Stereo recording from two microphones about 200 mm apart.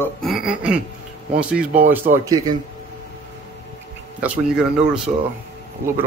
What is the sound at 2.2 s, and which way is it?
Speech, 20° right (ahead or behind).